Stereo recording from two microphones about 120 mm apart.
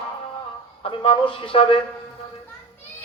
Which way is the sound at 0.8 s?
50° left (ahead or behind).